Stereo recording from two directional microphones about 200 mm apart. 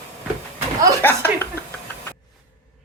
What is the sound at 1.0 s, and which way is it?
Chuckle, 10° left (ahead or behind).